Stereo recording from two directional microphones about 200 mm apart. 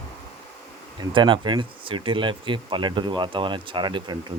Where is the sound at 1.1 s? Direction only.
25° right (ahead or behind).